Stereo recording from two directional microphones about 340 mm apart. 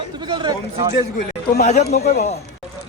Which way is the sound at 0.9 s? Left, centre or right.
Left.